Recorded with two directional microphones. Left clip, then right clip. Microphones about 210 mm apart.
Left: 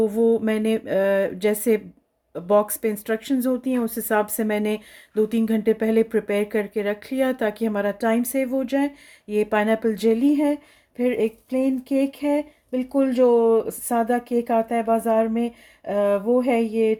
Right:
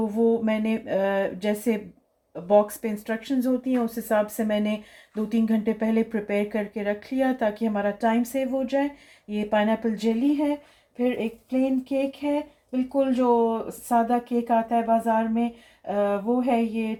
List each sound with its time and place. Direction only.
0.2 s speech: 45° left (ahead or behind)